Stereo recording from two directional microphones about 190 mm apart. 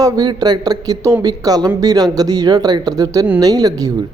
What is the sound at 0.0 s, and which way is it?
Speech, 20° right (ahead or behind).